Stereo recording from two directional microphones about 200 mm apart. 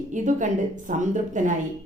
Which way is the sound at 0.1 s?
40° right (ahead or behind).